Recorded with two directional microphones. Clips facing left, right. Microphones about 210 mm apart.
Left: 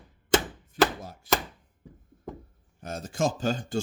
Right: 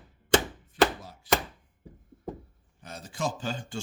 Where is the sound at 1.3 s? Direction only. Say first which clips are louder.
Even; 45° left (ahead or behind).